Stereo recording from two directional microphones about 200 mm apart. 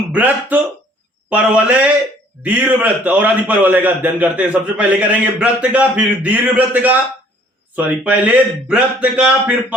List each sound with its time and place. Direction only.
0.1 s a man's voice: 10° right (ahead or behind)